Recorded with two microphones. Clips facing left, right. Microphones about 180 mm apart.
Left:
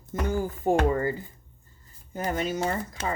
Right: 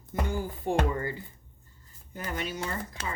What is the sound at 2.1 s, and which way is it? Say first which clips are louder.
Speech: left 6 dB; 45° left (ahead or behind).